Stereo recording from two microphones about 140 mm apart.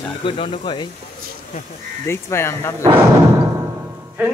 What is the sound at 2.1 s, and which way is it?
Speech, 20° left (ahead or behind).